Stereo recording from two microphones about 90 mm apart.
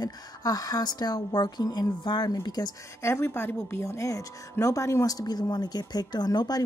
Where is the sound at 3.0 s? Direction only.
30° left (ahead or behind); by 6.7 s 50° left (ahead or behind).